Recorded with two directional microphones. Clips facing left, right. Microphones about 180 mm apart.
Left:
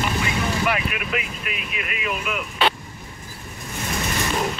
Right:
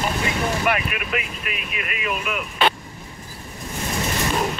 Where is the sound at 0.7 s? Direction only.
50° right (ahead or behind).